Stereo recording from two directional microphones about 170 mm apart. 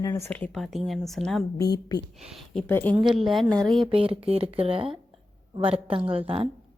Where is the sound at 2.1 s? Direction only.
Centre (ahead or behind).